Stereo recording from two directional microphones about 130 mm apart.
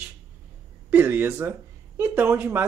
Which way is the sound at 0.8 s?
15° right (ahead or behind).